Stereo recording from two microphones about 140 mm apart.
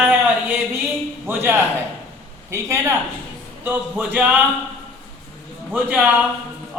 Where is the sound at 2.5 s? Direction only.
20° right (ahead or behind).